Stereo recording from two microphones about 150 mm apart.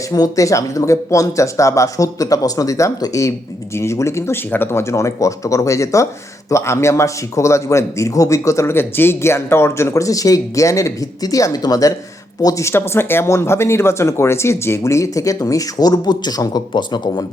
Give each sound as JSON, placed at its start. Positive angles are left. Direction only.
{"t": 0.1, "sound": "a man's voice", "side_deg": 25}